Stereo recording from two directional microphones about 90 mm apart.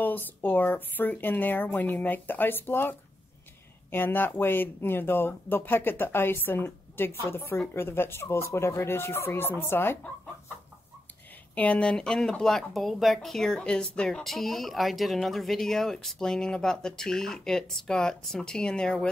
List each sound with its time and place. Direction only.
0.0 s speech: 20° left (ahead or behind)
11.5 s speech: 15° left (ahead or behind)